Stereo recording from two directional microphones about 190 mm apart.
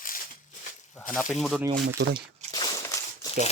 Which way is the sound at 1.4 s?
Centre (ahead or behind).